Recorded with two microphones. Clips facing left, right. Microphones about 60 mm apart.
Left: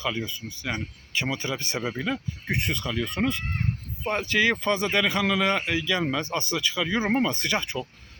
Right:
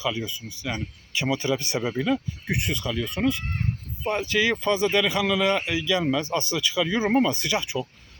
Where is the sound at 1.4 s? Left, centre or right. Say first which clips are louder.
Right 5 dB; left.